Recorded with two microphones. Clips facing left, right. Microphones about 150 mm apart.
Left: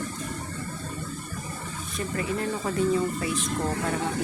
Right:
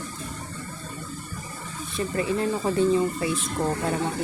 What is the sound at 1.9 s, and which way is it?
Speech, 30° right (ahead or behind).